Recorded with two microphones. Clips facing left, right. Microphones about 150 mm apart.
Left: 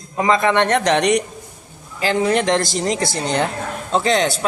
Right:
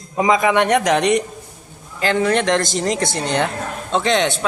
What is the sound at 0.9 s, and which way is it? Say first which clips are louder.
A man's voice: even; centre (ahead or behind).